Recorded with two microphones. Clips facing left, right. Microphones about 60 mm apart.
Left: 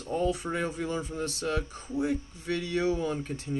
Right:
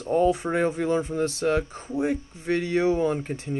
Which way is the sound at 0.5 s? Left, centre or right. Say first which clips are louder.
Right 8 dB; right.